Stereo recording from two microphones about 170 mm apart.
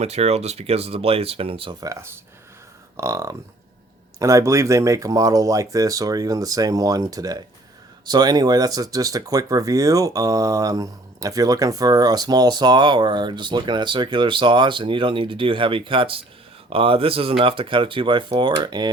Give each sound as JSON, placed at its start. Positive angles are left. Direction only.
{"t": 0.0, "sound": "speech", "side_deg": -40}
{"t": 1.8, "sound": "speech", "side_deg": -20}